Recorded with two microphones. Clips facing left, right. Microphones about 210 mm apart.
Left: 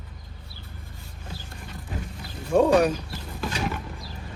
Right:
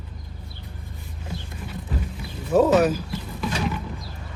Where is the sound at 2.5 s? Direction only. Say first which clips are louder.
Right 1 dB; 5° right (ahead or behind).